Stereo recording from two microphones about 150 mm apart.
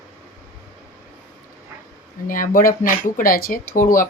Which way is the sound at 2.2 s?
65° left (ahead or behind).